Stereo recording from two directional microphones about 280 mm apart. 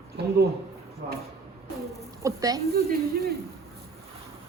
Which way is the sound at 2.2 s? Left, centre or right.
Centre.